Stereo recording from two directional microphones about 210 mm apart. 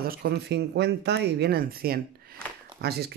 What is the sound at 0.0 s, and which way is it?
Speech, 45° right (ahead or behind).